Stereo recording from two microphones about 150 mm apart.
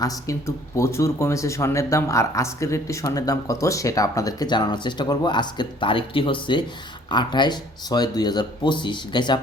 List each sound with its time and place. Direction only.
0.0 s speech: 20° left (ahead or behind)